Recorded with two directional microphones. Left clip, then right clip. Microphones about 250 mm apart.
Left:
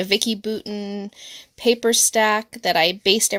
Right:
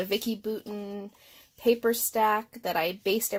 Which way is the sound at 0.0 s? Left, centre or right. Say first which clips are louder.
Left 9 dB; left.